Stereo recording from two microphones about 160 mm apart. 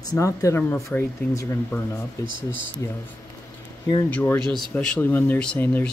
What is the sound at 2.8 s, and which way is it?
Speech, 20° left (ahead or behind).